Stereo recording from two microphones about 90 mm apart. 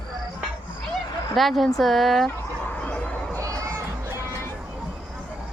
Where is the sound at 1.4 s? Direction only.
Centre (ahead or behind).